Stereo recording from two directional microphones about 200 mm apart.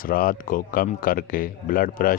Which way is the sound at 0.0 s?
45° left (ahead or behind).